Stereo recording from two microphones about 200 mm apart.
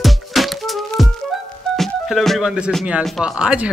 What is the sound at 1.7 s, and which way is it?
Speech, centre (ahead or behind).